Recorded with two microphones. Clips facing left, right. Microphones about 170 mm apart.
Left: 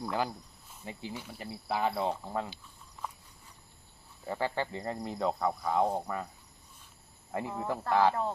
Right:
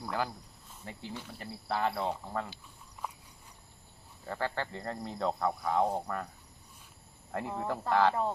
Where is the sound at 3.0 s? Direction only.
10° right (ahead or behind).